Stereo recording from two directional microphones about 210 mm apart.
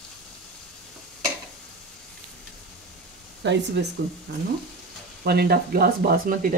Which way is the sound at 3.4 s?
55° right (ahead or behind).